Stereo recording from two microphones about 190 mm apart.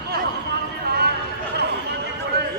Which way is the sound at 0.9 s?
55° right (ahead or behind).